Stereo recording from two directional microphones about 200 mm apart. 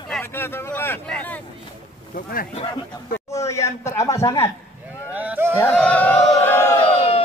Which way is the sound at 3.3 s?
15° left (ahead or behind).